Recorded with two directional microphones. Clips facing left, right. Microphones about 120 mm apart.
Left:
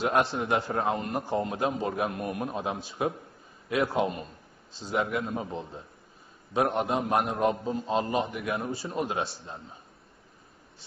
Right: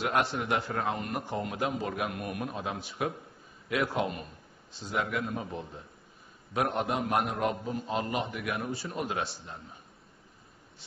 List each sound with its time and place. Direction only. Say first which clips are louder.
0.0 s a man's voice: left 3 dB; 30° left (ahead or behind)